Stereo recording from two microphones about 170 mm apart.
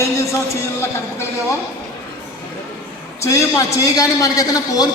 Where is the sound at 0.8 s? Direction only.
15° left (ahead or behind).